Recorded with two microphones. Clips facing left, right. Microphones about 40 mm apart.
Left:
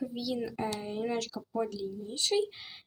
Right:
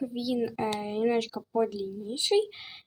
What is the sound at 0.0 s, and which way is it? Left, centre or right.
Speech, centre.